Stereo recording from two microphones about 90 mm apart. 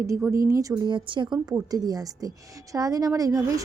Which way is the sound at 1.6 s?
45° right (ahead or behind).